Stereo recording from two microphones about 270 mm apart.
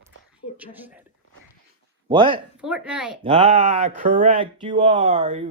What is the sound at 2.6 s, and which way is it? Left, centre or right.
Speech, centre.